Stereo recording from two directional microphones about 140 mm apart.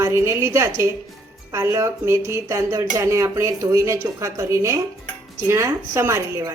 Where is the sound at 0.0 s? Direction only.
20° right (ahead or behind).